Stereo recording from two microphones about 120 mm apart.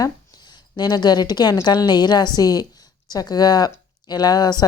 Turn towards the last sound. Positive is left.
turn(degrees=35)  # may be behind; listen again after turning